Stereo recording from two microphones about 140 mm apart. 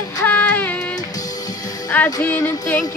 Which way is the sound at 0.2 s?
10° left (ahead or behind).